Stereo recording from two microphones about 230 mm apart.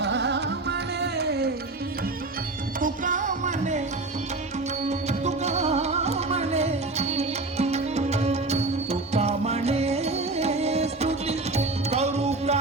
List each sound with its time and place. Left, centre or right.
0.0 s music: right
2.8 s music: right
4.9 s music: right